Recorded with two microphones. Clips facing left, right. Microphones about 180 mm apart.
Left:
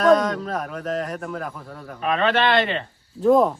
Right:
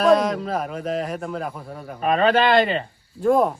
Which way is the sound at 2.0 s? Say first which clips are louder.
Right 3 dB; 40° right (ahead or behind).